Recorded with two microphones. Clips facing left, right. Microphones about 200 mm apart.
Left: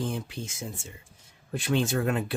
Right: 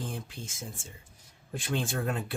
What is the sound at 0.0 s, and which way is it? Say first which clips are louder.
Speech: left 6 dB; 75° left (ahead or behind).